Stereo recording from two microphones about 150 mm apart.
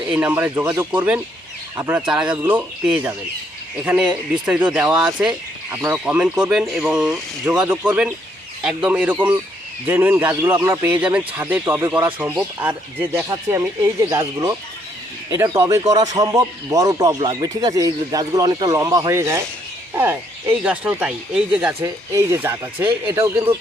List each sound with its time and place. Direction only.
0.1 s speech: 10° right (ahead or behind)